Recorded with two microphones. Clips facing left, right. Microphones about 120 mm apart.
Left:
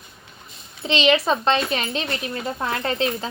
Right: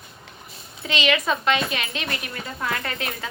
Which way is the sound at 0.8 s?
30° left (ahead or behind).